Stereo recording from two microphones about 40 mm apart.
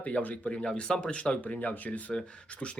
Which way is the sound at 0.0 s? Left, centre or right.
Left.